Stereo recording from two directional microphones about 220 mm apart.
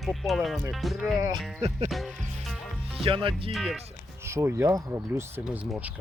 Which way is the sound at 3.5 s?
Centre (ahead or behind).